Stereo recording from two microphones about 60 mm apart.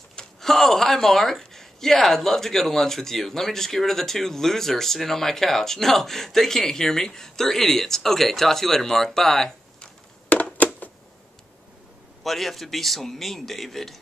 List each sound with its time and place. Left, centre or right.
0.1 s speech: centre
10.3 s a sound: left
12.2 s speech: centre